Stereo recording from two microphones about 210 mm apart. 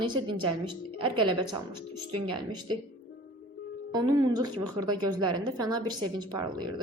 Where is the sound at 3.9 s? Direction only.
20° right (ahead or behind).